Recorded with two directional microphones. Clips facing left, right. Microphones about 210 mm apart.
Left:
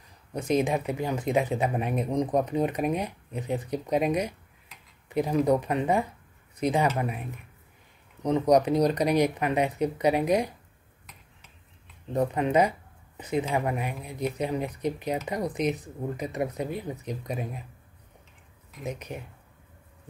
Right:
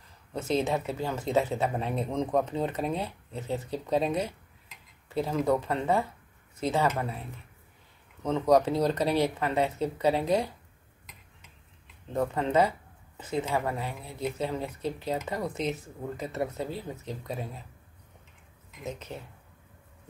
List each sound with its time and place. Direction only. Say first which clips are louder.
0.3 s speech: left 3 dB; 15° left (ahead or behind)
12.1 s speech: left 3 dB; 15° left (ahead or behind)
18.9 s speech: left 2 dB; 15° left (ahead or behind)